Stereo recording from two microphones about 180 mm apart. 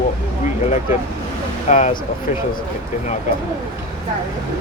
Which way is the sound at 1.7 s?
45° left (ahead or behind).